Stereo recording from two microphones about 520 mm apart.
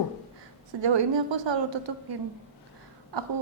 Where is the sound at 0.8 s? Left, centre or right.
Right.